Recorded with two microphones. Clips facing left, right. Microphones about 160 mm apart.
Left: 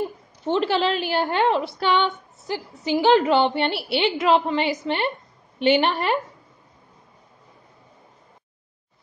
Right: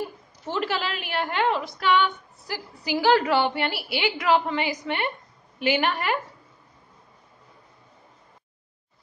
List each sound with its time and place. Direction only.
0.5 s a woman's voice: 30° left (ahead or behind)